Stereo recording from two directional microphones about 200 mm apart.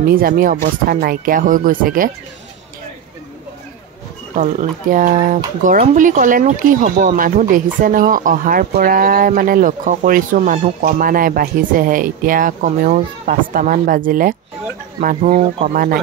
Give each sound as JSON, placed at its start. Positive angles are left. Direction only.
{"t": 0.0, "sound": "speech", "side_deg": -45}
{"t": 4.4, "sound": "speech", "side_deg": -40}